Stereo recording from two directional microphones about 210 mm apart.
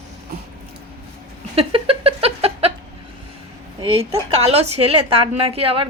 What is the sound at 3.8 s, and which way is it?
A woman's voice, 30° right (ahead or behind).